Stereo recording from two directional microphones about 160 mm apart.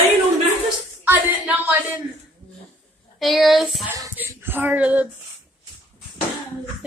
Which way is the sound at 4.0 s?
15° right (ahead or behind).